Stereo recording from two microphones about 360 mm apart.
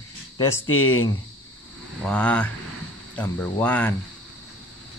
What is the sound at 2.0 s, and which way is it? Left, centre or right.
Speech, centre.